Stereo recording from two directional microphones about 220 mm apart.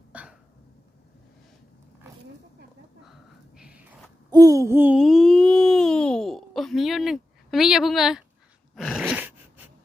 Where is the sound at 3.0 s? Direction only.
Centre (ahead or behind).